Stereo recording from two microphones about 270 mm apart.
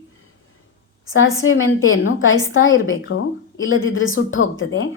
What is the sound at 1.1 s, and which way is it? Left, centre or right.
Speech, left.